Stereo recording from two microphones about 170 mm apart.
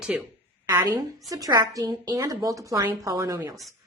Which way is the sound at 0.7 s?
25° right (ahead or behind).